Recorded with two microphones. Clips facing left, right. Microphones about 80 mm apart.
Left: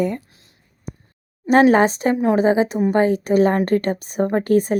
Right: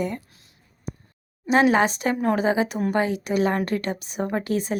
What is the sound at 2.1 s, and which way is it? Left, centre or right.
Speech, centre.